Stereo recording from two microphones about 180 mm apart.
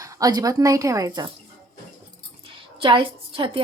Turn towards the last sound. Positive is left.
turn(degrees=-30)  # may be behind; listen again after turning